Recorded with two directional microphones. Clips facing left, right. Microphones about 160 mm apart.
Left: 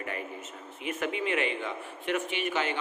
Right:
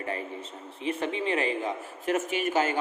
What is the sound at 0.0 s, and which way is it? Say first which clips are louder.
A man's voice: right 3 dB; 30° right (ahead or behind).